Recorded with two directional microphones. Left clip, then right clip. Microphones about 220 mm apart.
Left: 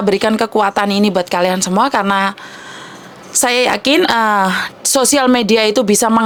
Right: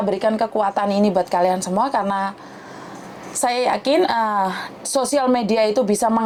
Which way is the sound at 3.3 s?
45° left (ahead or behind).